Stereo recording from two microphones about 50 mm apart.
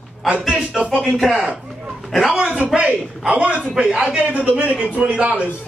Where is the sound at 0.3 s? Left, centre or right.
Right.